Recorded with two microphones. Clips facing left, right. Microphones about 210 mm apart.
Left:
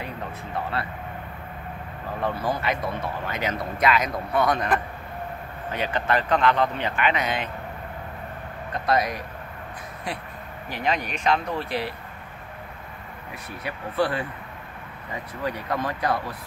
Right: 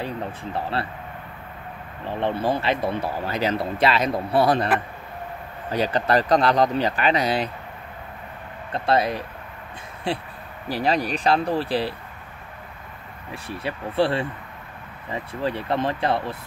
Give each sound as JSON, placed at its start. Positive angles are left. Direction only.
{"t": 0.0, "sound": "speech", "side_deg": -30}
{"t": 2.0, "sound": "speech", "side_deg": -30}
{"t": 5.7, "sound": "speech", "side_deg": -35}
{"t": 8.7, "sound": "speech", "side_deg": -30}
{"t": 13.3, "sound": "speech", "side_deg": -30}
{"t": 15.4, "sound": "speech", "side_deg": -25}